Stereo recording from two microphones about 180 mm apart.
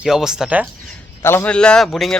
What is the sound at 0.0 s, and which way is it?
Speech, 5° right (ahead or behind).